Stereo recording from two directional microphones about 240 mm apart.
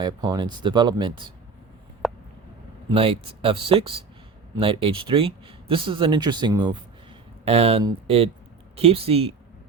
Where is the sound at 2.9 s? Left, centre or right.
Right.